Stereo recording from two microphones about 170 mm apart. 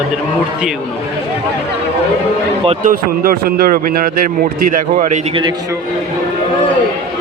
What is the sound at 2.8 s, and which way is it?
A man's voice, 60° right (ahead or behind).